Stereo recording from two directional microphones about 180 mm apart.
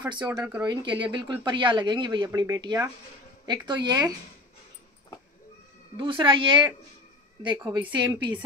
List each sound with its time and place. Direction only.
0.1 s speech: 25° right (ahead or behind)
5.9 s speech: 25° right (ahead or behind)
7.9 s speech: 25° right (ahead or behind)